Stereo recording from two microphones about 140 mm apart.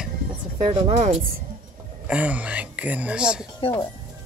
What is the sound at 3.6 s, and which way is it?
Speech, 40° left (ahead or behind).